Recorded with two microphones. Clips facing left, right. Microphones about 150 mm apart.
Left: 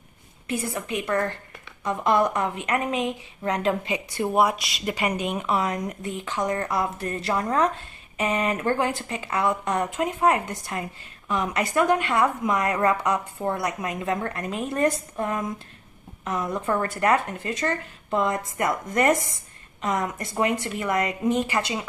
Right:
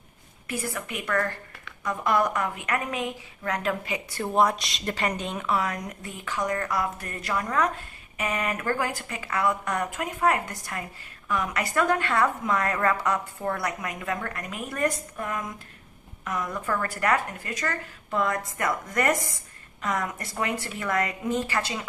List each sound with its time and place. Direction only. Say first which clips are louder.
0.5 s a woman's voice: left 4 dB; 20° left (ahead or behind)
4.3 s a woman's voice: left 1 dB; 10° left (ahead or behind)